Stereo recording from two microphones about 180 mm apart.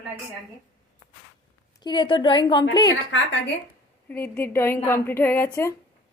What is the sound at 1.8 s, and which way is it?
A woman's voice, 25° left (ahead or behind).